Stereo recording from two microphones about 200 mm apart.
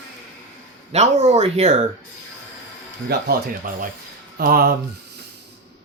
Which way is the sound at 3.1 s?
50° right (ahead or behind).